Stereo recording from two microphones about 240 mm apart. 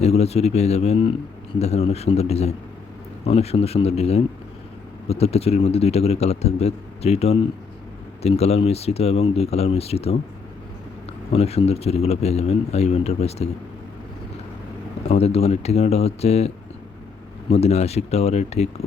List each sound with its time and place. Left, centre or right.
0.0 s speech: left
11.3 s speech: left
15.0 s speech: left
17.5 s speech: left